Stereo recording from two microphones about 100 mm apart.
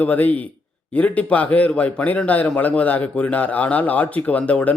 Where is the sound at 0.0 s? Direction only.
15° left (ahead or behind).